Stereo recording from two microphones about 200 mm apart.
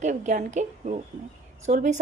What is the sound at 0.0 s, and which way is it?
A woman's voice, 40° right (ahead or behind).